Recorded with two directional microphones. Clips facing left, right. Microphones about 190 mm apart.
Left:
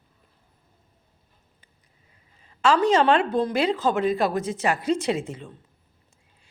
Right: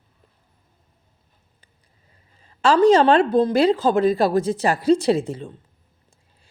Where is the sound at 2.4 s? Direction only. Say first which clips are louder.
Right 6 dB; 35° right (ahead or behind).